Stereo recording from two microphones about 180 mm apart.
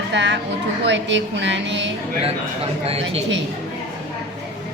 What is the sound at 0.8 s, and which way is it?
A woman's voice, 90° right.